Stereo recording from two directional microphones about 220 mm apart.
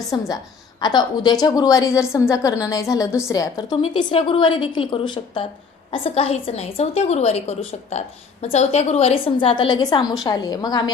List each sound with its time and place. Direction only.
0.1 s a woman's voice: 20° left (ahead or behind)
3.7 s a woman's voice: 25° left (ahead or behind)